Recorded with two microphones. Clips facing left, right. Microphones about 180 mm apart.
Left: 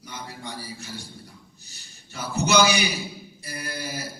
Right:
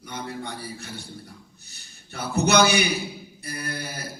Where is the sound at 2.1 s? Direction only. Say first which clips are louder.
Right 1 dB; 60° right (ahead or behind).